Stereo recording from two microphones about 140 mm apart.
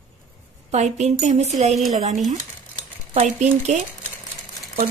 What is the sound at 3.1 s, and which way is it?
Speech, 55° right (ahead or behind).